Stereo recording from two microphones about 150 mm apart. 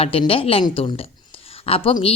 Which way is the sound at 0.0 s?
40° left (ahead or behind).